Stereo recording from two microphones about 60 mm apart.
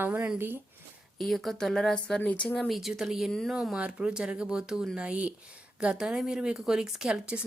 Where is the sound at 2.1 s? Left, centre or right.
Centre.